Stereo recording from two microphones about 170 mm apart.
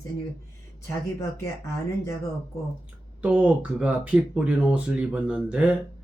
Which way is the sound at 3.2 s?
10° right (ahead or behind).